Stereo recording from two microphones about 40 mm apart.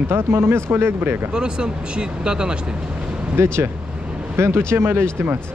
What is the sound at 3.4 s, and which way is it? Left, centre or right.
A man's voice, right.